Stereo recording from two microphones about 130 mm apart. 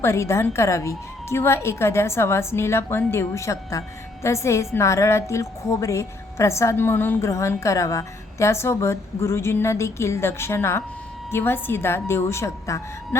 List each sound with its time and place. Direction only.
0.0 s a woman's voice: 20° left (ahead or behind)